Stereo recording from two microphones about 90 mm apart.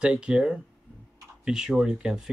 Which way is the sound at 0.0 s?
10° right (ahead or behind).